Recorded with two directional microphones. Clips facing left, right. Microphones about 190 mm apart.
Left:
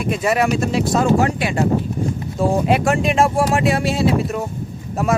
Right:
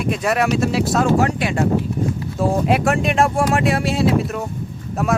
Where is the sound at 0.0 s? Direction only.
Centre (ahead or behind).